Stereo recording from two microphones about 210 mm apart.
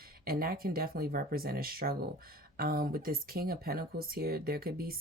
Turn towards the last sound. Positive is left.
turn(degrees=-45)  # may be behind; listen again after turning